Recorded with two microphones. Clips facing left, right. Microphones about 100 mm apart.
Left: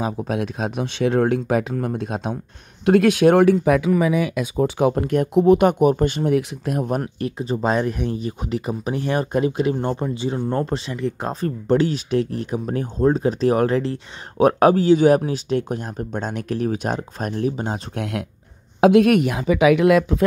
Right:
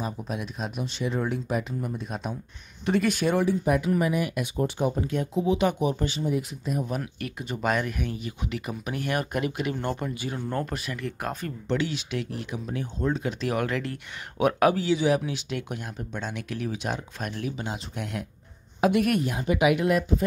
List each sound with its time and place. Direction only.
0.3 s speech: 90° left; by 6.9 s 75° left (ahead or behind)
7.2 s speech: 30° left (ahead or behind)
11.4 s speech: 45° left (ahead or behind)
17.9 s speech: 80° left
18.8 s a woman's voice: 90° left